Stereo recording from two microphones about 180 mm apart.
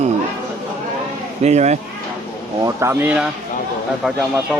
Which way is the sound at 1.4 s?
40° right (ahead or behind).